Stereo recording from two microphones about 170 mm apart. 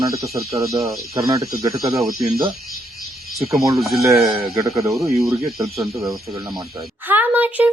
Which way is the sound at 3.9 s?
20° right (ahead or behind).